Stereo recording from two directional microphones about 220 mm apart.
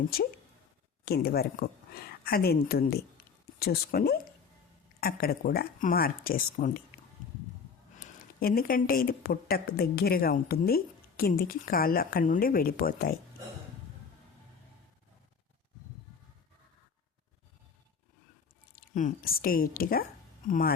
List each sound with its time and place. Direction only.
1.0 s speech: 45° left (ahead or behind)
7.9 s speech: 40° left (ahead or behind)
18.9 s a woman's voice: 40° left (ahead or behind)